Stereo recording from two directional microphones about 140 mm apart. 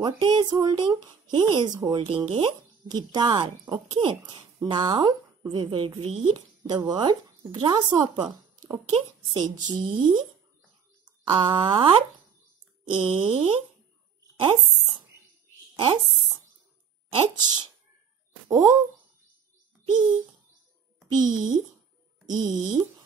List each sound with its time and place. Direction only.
0.0 s speech: 35° right (ahead or behind)
2.0 s speech: 40° right (ahead or behind)
15.7 s a sound: 35° right (ahead or behind)
17.2 s speech: 30° right (ahead or behind)
19.9 s speech: 35° right (ahead or behind)
21.2 s speech: 30° right (ahead or behind)